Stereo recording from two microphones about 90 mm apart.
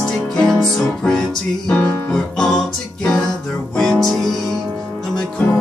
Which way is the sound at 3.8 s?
5° left (ahead or behind).